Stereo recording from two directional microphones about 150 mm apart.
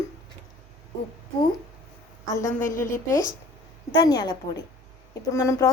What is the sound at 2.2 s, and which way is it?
A woman's voice, 20° left (ahead or behind).